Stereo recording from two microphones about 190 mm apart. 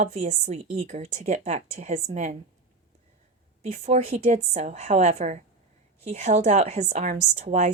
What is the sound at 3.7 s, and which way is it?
A woman's voice, 35° right (ahead or behind).